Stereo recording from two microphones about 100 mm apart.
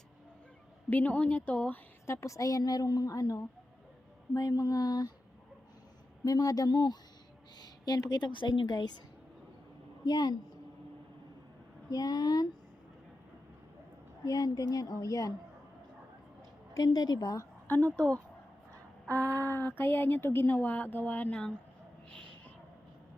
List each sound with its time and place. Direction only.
0.9 s a woman's voice: 15° left (ahead or behind)
2.2 s a woman's voice: 35° left (ahead or behind)
6.2 s a woman's voice: 35° left (ahead or behind)
10.1 s a woman's voice: 45° left (ahead or behind)
11.9 s a woman's voice: 40° left (ahead or behind)
14.3 s a woman's voice: 40° left (ahead or behind)
16.7 s a woman's voice: 40° left (ahead or behind)
19.4 s speech: 20° left (ahead or behind)
22.1 s a sound: 10° left (ahead or behind)